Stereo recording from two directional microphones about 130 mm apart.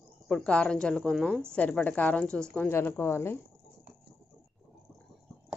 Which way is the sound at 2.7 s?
20° left (ahead or behind).